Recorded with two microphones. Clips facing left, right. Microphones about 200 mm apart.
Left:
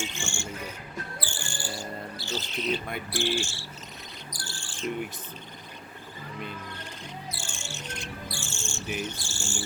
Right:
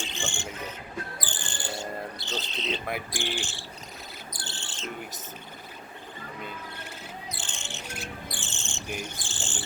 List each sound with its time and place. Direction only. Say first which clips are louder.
0.0 s cricket: even; 15° right (ahead or behind)
1.2 s bird: even; 20° right (ahead or behind)
3.1 s speech: left 5 dB; 15° right (ahead or behind)
4.4 s cricket: left 1 dB; 20° right (ahead or behind)
7.3 s music: even; 20° right (ahead or behind)
8.3 s cricket: left 2 dB; 20° right (ahead or behind)